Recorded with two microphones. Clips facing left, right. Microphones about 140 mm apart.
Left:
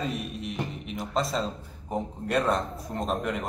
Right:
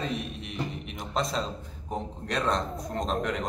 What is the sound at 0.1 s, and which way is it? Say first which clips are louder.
Music: left 1 dB; centre (ahead or behind).